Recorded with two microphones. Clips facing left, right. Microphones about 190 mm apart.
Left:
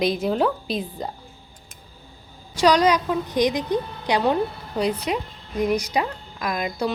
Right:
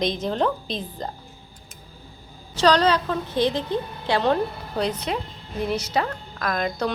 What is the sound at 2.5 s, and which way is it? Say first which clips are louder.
A woman's voice: left 1 dB; 10° left (ahead or behind).